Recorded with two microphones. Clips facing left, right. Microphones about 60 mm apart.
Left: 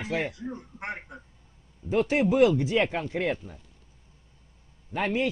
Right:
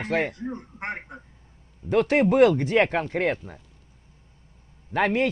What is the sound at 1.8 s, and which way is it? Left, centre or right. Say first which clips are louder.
Speech: right 4 dB; right.